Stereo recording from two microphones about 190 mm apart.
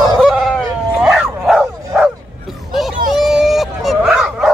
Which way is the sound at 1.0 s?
Centre (ahead or behind).